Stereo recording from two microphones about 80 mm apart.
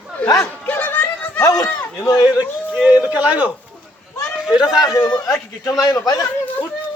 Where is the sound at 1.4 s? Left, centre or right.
Left.